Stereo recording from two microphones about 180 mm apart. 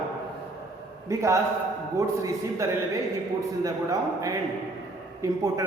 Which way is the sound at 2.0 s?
15° right (ahead or behind).